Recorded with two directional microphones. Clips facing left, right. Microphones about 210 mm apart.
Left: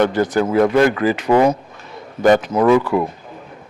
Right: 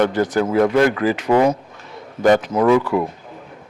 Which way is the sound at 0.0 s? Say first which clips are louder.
Left 1 dB; 15° left (ahead or behind).